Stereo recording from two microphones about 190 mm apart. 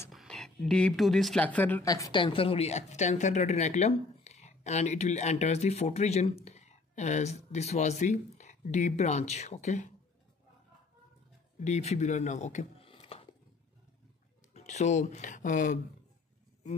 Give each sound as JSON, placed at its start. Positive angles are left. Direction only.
{"t": 0.1, "sound": "speech", "side_deg": 0}
{"t": 11.6, "sound": "speech", "side_deg": 35}
{"t": 14.5, "sound": "speech", "side_deg": 35}